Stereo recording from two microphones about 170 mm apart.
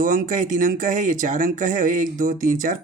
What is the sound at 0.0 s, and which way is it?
Speech, 50° right (ahead or behind).